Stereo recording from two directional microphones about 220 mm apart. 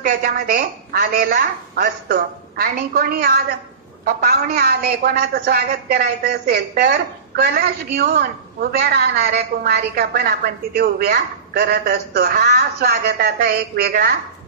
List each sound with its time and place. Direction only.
0.0 s a woman's voice: 40° right (ahead or behind)